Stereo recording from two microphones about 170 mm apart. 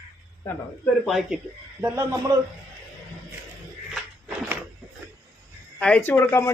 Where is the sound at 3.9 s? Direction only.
10° right (ahead or behind).